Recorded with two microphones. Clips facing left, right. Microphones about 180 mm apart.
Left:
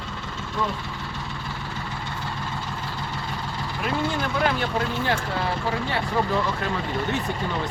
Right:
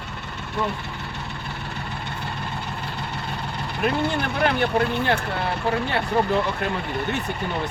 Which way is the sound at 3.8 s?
65° right (ahead or behind).